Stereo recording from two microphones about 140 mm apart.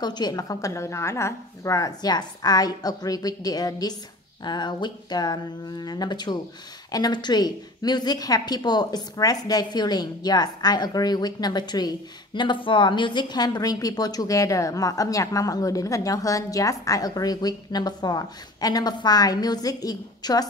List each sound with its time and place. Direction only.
0.0 s a woman's voice: 30° left (ahead or behind)